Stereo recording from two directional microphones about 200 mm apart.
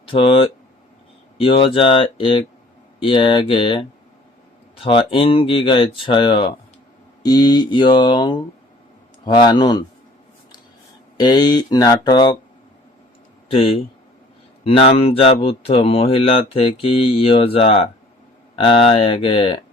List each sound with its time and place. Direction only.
0.0 s speech: 25° left (ahead or behind)
11.2 s speech: 20° left (ahead or behind)
13.5 s speech: 30° left (ahead or behind)